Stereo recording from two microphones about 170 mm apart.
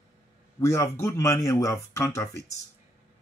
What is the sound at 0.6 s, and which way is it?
Speech, 15° left (ahead or behind).